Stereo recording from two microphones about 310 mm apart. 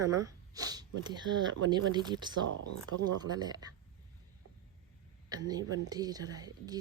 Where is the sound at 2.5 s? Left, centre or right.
Right.